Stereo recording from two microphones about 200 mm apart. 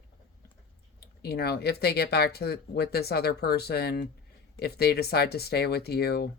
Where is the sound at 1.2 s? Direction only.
55° left (ahead or behind).